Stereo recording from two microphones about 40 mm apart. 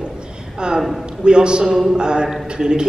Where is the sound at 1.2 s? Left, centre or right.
Right.